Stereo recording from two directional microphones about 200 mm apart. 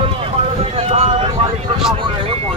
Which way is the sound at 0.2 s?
30° right (ahead or behind).